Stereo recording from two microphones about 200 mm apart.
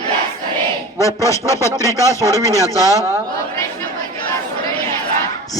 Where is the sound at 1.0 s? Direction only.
15° left (ahead or behind).